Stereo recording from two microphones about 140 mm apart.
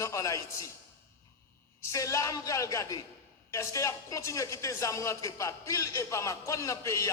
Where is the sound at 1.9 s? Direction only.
20° left (ahead or behind).